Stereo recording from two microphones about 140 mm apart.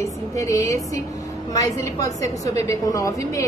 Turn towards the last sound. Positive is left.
turn(degrees=20)  # may be behind; listen again after turning